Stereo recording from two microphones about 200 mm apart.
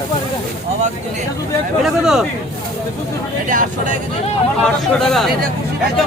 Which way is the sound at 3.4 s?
40° right (ahead or behind).